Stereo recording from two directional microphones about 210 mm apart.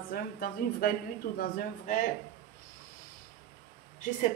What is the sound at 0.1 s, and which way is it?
A woman's voice, 45° left (ahead or behind).